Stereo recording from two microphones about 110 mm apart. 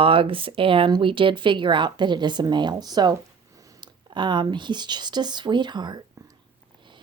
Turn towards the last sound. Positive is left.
turn(degrees=-40)  # may be behind; listen again after turning